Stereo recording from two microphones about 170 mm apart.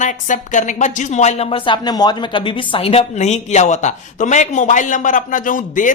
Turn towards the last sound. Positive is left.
turn(degrees=50)  # may be behind; listen again after turning